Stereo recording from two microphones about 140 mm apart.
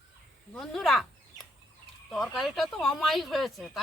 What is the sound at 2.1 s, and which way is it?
Speech, centre (ahead or behind).